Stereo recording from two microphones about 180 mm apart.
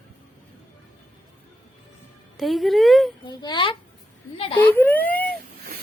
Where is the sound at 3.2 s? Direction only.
25° left (ahead or behind).